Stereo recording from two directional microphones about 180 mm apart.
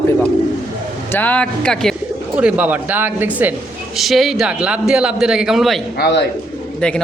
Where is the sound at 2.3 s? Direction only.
10° right (ahead or behind).